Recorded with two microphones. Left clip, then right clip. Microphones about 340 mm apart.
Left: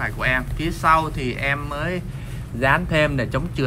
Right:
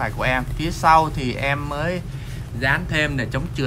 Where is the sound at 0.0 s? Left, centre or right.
Centre.